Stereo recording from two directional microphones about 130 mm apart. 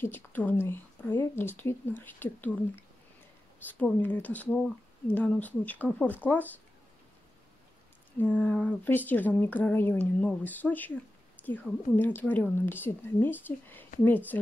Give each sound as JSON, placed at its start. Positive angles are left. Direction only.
{"t": 0.0, "sound": "a woman's voice", "side_deg": 15}
{"t": 3.8, "sound": "a woman's voice", "side_deg": 10}
{"t": 8.2, "sound": "a woman's voice", "side_deg": 10}